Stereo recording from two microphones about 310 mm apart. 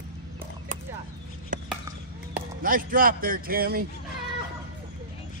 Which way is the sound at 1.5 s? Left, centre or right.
Right.